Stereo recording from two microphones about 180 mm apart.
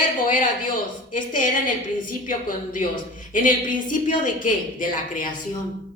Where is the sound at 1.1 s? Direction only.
45° left (ahead or behind).